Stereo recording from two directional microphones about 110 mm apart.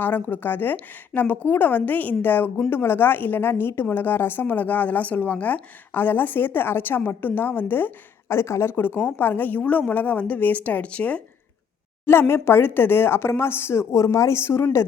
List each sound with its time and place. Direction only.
0.0 s a woman's voice: 15° left (ahead or behind)
12.3 s speech: 20° left (ahead or behind)